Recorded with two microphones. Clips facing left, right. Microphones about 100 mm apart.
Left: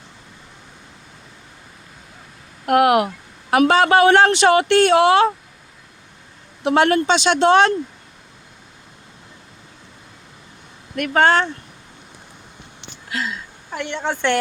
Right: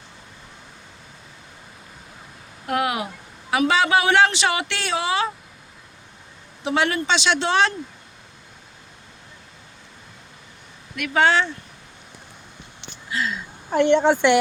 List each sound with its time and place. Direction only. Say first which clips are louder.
2.6 s speech: left 9 dB; 65° left (ahead or behind)
3.5 s a man's voice: left 5 dB; 50° left (ahead or behind)
6.7 s a man's voice: left 6 dB; 50° left (ahead or behind)
10.9 s a man's voice: left 3 dB; 45° left (ahead or behind)
13.7 s a woman's voice: right 9 dB; 30° right (ahead or behind)